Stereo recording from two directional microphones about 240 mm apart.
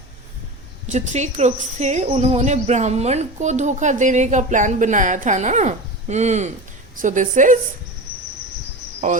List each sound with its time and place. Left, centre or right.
0.9 s a woman's voice: right
9.0 s speech: right